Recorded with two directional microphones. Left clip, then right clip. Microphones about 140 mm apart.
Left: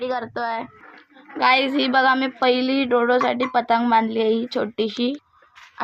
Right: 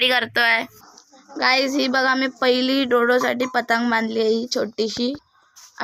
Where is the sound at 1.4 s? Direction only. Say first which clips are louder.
Left 1 dB; 5° left (ahead or behind).